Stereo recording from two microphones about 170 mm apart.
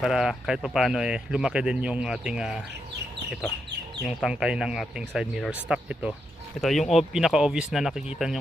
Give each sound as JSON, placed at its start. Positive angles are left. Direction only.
{"t": 0.0, "sound": "speech", "side_deg": 0}
{"t": 4.0, "sound": "speech", "side_deg": -5}